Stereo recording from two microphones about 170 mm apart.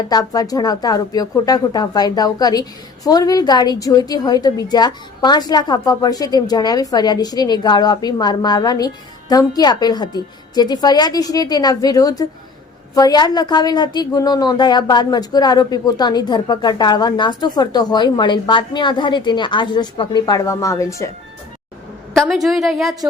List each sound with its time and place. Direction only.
0.1 s speech: 20° left (ahead or behind)
22.1 s a woman's voice: centre (ahead or behind)